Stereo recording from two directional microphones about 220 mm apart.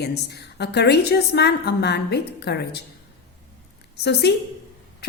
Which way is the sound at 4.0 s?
50° left (ahead or behind).